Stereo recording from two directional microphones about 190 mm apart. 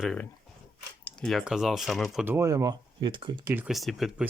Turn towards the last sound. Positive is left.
turn(degrees=0)  # may be behind; listen again after turning